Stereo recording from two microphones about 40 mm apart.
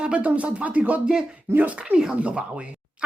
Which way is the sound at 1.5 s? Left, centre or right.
Right.